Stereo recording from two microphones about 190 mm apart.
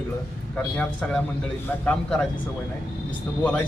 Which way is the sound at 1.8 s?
5° left (ahead or behind).